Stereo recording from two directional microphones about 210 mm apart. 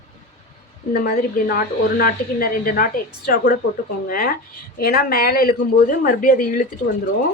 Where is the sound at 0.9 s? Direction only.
45° left (ahead or behind).